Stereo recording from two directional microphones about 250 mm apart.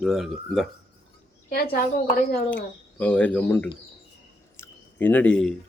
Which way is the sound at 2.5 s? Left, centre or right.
Centre.